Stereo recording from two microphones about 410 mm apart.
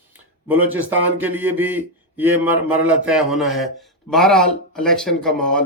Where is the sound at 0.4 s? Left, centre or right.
Centre.